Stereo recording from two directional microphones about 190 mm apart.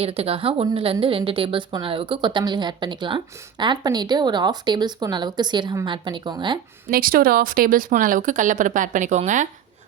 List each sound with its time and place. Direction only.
0.0 s a woman's voice: 30° right (ahead or behind)
6.9 s speech: 50° right (ahead or behind)